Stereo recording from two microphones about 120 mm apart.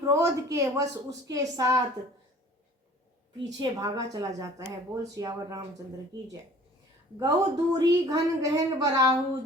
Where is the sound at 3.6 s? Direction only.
30° right (ahead or behind).